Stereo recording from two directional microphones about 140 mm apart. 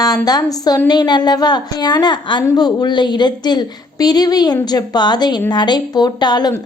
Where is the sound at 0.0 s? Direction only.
25° left (ahead or behind).